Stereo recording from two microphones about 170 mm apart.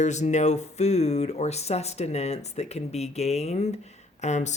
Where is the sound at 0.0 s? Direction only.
45° left (ahead or behind).